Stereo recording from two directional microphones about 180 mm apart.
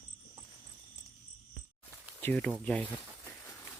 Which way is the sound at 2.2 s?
5° left (ahead or behind).